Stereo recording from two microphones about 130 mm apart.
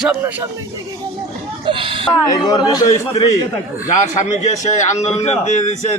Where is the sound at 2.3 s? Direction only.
30° left (ahead or behind).